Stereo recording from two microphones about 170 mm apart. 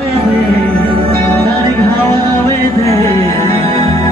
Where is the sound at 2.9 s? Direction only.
35° right (ahead or behind).